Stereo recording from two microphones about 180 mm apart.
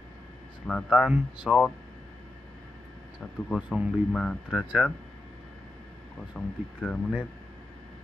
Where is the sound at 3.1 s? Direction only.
5° right (ahead or behind).